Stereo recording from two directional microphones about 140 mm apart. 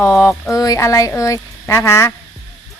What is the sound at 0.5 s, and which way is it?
Speech, 25° left (ahead or behind).